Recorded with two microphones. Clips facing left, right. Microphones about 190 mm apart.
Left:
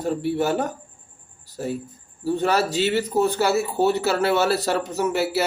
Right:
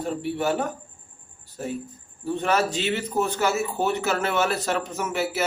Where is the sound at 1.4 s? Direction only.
35° left (ahead or behind).